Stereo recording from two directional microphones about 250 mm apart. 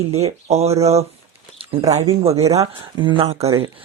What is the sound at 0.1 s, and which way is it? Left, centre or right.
Speech, right.